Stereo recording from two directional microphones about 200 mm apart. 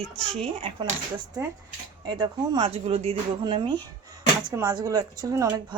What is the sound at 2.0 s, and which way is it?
Speech, 20° right (ahead or behind).